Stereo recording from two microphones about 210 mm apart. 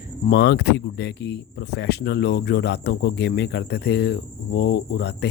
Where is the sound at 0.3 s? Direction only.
50° left (ahead or behind).